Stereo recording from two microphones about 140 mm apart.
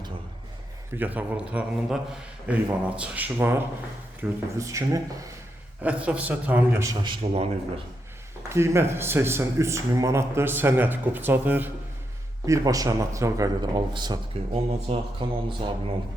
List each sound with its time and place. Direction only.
0.9 s speech: 10° right (ahead or behind)
5.8 s speech: 10° right (ahead or behind)
7.0 s speech: 40° right (ahead or behind)
8.4 s speech: 20° right (ahead or behind)
12.5 s speech: 25° right (ahead or behind); by 15.5 s 40° right (ahead or behind)